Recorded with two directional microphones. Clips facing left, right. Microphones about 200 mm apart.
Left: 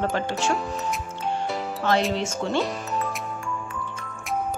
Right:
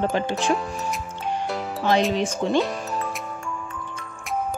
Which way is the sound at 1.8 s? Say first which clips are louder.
Right 3 dB; 15° right (ahead or behind).